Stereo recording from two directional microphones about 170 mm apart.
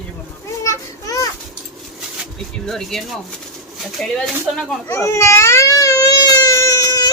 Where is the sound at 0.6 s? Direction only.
20° left (ahead or behind).